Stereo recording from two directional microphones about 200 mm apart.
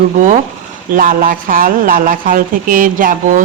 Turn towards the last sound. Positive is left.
turn(degrees=-40)  # may be behind; listen again after turning